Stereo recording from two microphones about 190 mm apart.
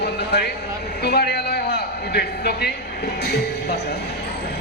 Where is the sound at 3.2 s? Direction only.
60° left (ahead or behind).